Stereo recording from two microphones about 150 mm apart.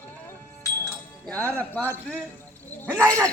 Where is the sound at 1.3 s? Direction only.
10° left (ahead or behind).